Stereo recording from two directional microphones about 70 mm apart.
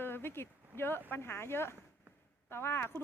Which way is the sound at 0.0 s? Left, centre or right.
Left.